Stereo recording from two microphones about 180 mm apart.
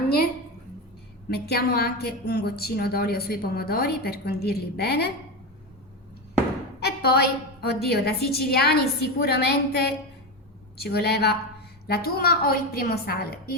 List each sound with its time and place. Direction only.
1.3 s a woman's voice: 60° left (ahead or behind)
6.8 s a woman's voice: 60° left (ahead or behind)